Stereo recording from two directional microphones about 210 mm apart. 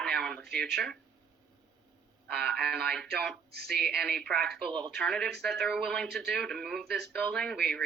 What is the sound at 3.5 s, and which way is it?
Speech, 50° right (ahead or behind).